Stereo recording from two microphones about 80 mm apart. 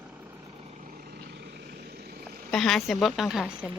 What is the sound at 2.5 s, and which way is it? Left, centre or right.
Speech, centre.